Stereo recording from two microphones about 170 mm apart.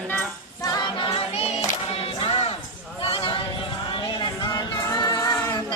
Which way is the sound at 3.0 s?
35° left (ahead or behind).